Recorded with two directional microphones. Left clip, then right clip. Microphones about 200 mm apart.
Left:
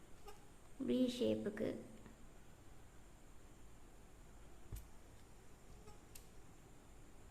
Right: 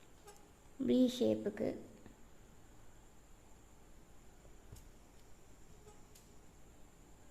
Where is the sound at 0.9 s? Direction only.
30° right (ahead or behind).